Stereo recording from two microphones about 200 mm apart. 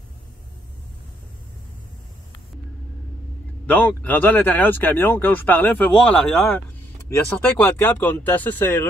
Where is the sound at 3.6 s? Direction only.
10° left (ahead or behind).